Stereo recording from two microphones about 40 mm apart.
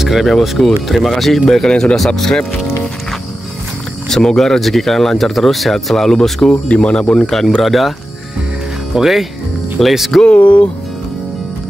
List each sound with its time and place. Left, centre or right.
0.0 s speech: centre
1.7 s speech: left
4.1 s speech: centre
6.5 s speech: left
7.6 s speech: centre
8.9 s speech: centre
10.2 s speech: left